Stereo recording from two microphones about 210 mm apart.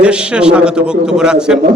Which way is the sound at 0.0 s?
5° right (ahead or behind).